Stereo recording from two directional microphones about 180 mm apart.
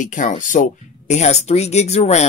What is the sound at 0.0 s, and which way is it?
Speech, 45° left (ahead or behind).